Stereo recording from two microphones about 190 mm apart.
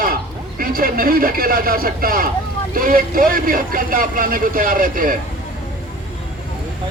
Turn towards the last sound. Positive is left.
turn(degrees=-45)  # may be behind; listen again after turning